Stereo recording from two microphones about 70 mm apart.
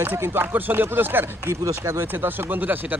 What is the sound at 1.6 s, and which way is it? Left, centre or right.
Speech, right.